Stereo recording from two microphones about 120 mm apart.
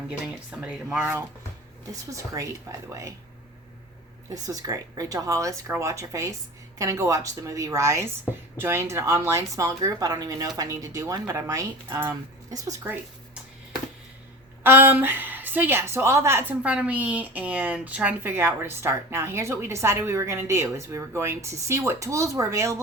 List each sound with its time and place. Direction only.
0.6 s speech: 5° right (ahead or behind)
1.9 s a woman's voice: 30° right (ahead or behind)
4.4 s a woman's voice: 30° right (ahead or behind)
14.6 s a woman's voice: 20° right (ahead or behind)